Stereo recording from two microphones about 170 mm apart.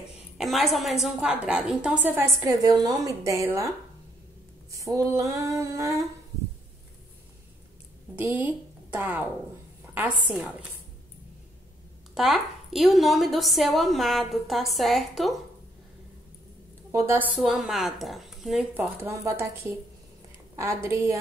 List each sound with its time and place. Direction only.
0.4 s a woman's voice: centre (ahead or behind); by 3.7 s 15° right (ahead or behind)
4.7 s female singing: 20° right (ahead or behind)
8.2 s a woman's voice: 10° right (ahead or behind)
10.3 s a woman's voice: 5° right (ahead or behind)
12.1 s a woman's voice: centre (ahead or behind)
16.9 s a woman's voice: 10° right (ahead or behind)
17.4 s a woman's voice: centre (ahead or behind)
19.0 s a woman's voice: 15° right (ahead or behind)